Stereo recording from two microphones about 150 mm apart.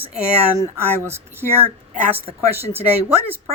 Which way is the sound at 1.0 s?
15° right (ahead or behind).